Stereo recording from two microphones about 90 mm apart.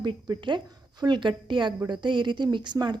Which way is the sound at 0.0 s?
60° right (ahead or behind).